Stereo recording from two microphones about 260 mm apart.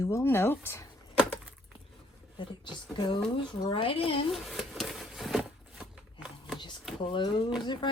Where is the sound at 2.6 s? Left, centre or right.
Centre.